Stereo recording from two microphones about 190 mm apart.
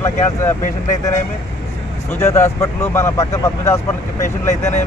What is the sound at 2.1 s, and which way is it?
Speech, 15° left (ahead or behind).